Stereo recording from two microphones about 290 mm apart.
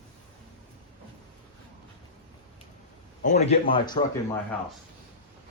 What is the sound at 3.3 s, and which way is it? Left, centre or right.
Speech, left.